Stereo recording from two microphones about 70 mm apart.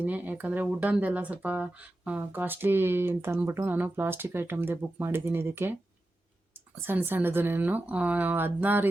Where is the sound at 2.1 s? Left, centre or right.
Right.